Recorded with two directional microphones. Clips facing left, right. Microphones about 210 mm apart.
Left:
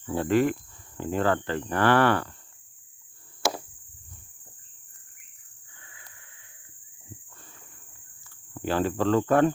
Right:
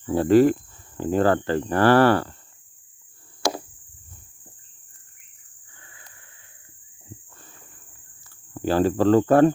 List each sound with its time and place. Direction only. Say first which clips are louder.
0.0 s speech: right 7 dB; 35° right (ahead or behind)
3.4 s chop: right 3 dB; 5° left (ahead or behind)
5.8 s wheeze: right 2 dB; 40° right (ahead or behind)
8.5 s speech: right 6 dB; 35° right (ahead or behind)